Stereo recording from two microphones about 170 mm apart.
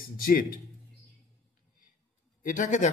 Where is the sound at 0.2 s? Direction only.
60° left (ahead or behind).